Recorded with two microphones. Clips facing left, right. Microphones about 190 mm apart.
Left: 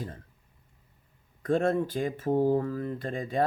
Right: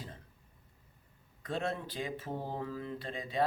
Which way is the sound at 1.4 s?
50° left (ahead or behind).